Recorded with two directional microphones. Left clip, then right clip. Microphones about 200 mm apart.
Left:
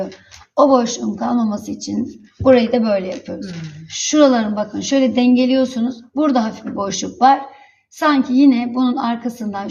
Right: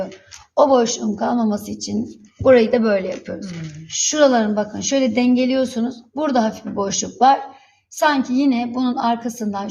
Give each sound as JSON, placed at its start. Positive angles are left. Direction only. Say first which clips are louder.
{"t": 0.5, "sound": "a woman's voice", "louder": "left 1 dB", "side_deg": -25}